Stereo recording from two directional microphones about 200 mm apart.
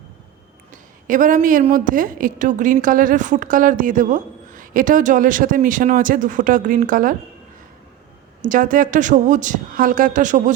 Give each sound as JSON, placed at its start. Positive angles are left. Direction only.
{"t": 0.7, "sound": "a sound", "side_deg": -40}
{"t": 1.7, "sound": "a woman's voice", "side_deg": -40}
{"t": 8.4, "sound": "a woman's voice", "side_deg": -40}